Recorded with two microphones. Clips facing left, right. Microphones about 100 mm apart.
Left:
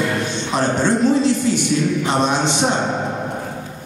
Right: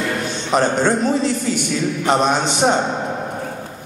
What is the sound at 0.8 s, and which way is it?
Speech, 50° right (ahead or behind).